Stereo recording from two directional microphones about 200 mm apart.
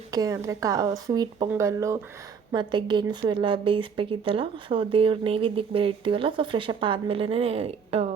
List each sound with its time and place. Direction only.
0.1 s a woman's voice: 15° right (ahead or behind)